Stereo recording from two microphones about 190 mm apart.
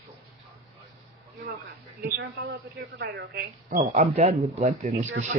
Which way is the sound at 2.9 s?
60° right (ahead or behind).